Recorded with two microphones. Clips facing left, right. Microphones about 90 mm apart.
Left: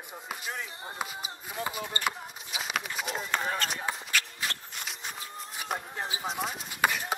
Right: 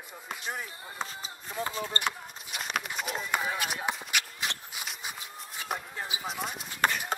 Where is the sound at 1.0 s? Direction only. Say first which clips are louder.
Even; 10° left (ahead or behind).